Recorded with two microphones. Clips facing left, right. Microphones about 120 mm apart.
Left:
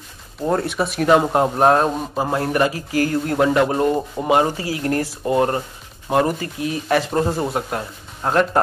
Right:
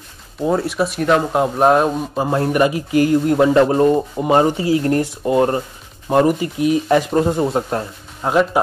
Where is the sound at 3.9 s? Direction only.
5° right (ahead or behind).